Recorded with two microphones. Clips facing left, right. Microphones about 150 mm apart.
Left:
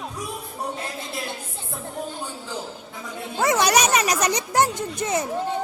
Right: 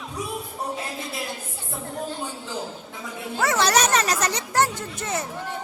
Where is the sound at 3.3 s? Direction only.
15° left (ahead or behind).